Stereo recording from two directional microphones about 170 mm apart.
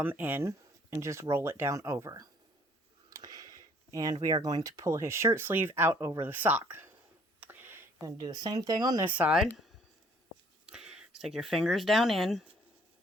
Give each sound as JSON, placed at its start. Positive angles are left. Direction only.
{"t": 0.0, "sound": "speech", "side_deg": -10}
{"t": 3.1, "sound": "a sound", "side_deg": -20}
{"t": 3.9, "sound": "speech", "side_deg": -20}
{"t": 7.3, "sound": "a sound", "side_deg": -10}
{"t": 7.9, "sound": "speech", "side_deg": -20}
{"t": 9.0, "sound": "speech", "side_deg": -10}
{"t": 10.7, "sound": "speech", "side_deg": -5}